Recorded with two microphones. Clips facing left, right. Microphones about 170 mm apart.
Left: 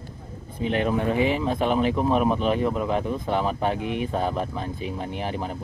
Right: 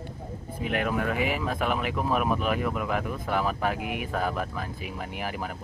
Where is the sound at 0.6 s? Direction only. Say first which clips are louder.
Left 4 dB; 30° left (ahead or behind).